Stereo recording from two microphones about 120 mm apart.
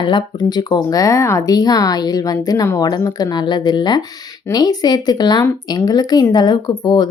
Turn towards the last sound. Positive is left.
turn(degrees=40)  # may be behind; listen again after turning